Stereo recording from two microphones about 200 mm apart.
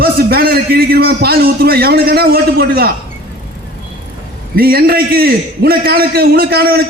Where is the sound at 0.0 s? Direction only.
50° right (ahead or behind).